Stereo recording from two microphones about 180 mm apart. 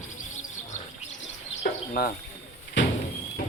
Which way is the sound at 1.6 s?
60° left (ahead or behind).